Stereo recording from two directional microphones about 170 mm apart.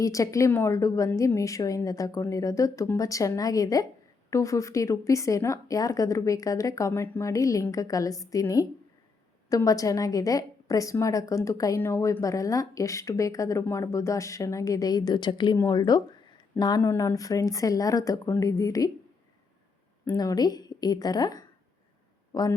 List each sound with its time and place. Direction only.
0.0 s a woman's voice: 20° left (ahead or behind)
20.1 s a woman's voice: 20° left (ahead or behind)